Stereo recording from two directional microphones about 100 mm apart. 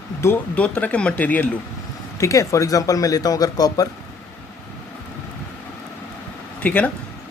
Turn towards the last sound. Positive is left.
turn(degrees=15)  # may be behind; listen again after turning